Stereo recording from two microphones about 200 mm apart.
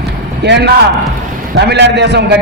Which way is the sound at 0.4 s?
60° right (ahead or behind).